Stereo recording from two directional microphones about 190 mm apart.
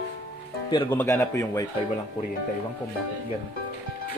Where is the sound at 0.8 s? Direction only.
15° left (ahead or behind).